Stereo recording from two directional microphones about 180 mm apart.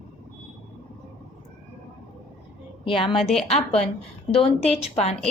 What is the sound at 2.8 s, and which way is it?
Speech, 30° left (ahead or behind).